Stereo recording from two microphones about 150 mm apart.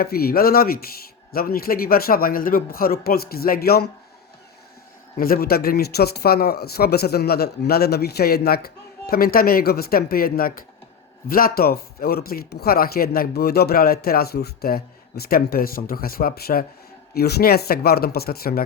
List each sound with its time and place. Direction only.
0.0 s speech: 90° left
5.1 s speech: 80° left